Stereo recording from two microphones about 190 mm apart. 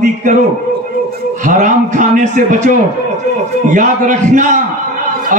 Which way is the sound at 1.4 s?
40° right (ahead or behind).